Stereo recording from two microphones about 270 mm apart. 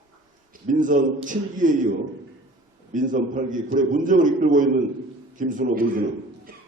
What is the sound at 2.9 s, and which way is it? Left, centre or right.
A man's voice, right.